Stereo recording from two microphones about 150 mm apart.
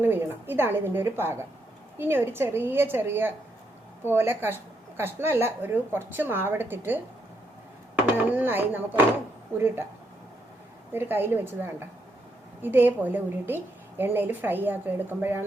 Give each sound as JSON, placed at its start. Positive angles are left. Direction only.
{"t": 0.0, "sound": "a woman's voice", "side_deg": -15}
{"t": 8.3, "sound": "a woman's voice", "side_deg": -10}
{"t": 10.9, "sound": "a woman's voice", "side_deg": -15}